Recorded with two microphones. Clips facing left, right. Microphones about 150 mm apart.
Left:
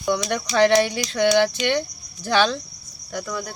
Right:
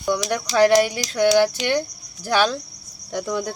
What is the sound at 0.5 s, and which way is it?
Speech, 5° right (ahead or behind).